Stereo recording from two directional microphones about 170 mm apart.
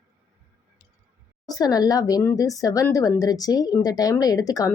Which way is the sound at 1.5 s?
20° left (ahead or behind).